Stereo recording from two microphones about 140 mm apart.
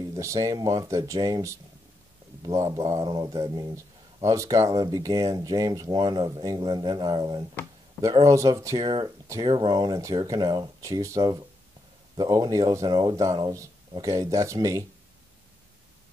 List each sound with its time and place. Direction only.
0.1 s speech: 25° right (ahead or behind)